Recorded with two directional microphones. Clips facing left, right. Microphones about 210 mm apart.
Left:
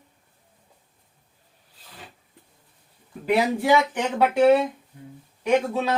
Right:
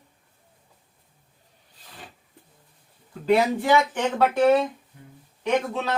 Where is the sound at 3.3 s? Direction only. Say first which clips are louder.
Left 1 dB; 10° left (ahead or behind).